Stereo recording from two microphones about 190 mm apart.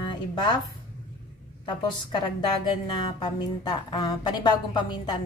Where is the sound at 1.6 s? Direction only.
25° left (ahead or behind).